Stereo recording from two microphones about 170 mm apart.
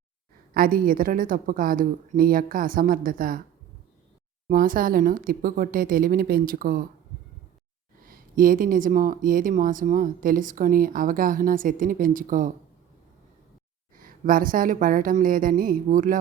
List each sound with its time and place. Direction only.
0.5 s a woman's voice: 55° right (ahead or behind)
4.4 s a woman's voice: 55° right (ahead or behind)
8.0 s speech: 55° right (ahead or behind)
13.9 s a woman's voice: 55° right (ahead or behind)